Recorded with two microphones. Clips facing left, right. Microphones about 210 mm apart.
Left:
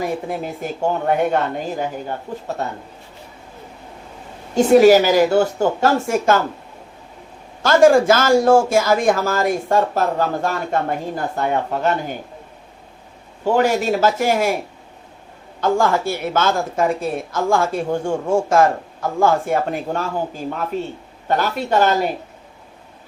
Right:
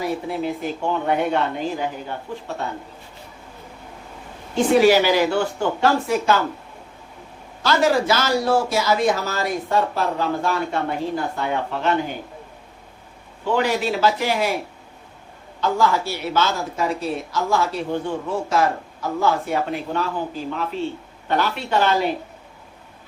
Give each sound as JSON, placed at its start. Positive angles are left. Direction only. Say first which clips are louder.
{"t": 0.3, "sound": "speech", "louder": "right 1 dB", "side_deg": 45}
{"t": 4.5, "sound": "speech", "louder": "left 5 dB", "side_deg": 45}
{"t": 7.6, "sound": "speech", "louder": "left 7 dB", "side_deg": 50}
{"t": 13.4, "sound": "speech", "louder": "left 4 dB", "side_deg": 45}
{"t": 15.6, "sound": "speech", "louder": "left 3 dB", "side_deg": 50}